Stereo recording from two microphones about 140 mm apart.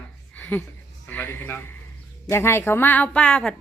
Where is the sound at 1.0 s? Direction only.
15° left (ahead or behind).